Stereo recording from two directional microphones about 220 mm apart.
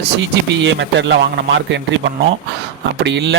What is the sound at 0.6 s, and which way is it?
A man's voice, 55° right (ahead or behind).